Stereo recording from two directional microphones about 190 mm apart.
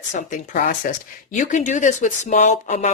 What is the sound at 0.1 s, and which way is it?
Speech, 40° left (ahead or behind).